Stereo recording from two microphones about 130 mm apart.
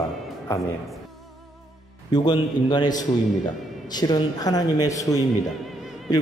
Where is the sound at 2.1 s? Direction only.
35° left (ahead or behind).